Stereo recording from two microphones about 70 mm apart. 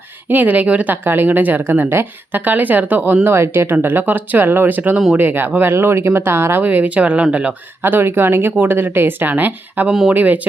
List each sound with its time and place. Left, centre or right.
0.3 s speech: right
3.2 s speech: right
5.7 s speech: right
6.7 s speech: right
7.8 s speech: right
9.9 s speech: centre
10.2 s speech: right